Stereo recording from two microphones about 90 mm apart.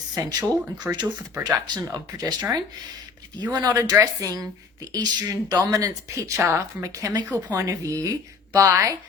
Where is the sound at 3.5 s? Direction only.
40° right (ahead or behind).